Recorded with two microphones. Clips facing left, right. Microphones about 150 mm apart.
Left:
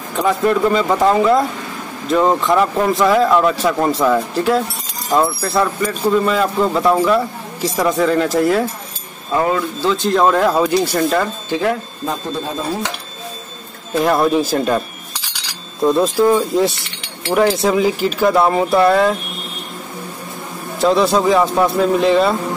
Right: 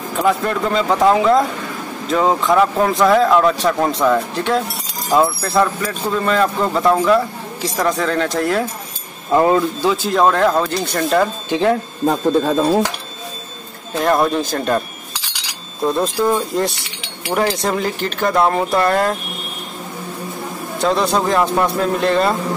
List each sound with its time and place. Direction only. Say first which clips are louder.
0.2 s speech: left 3 dB; centre (ahead or behind)
9.3 s speech: right 3 dB; 25° right (ahead or behind)
9.8 s speech: left 2 dB; 5° right (ahead or behind)
11.4 s speech: right 2 dB; 20° right (ahead or behind)
13.9 s speech: left 2 dB; centre (ahead or behind)
15.8 s speech: left 4 dB; centre (ahead or behind)
20.8 s speech: left 3 dB; centre (ahead or behind)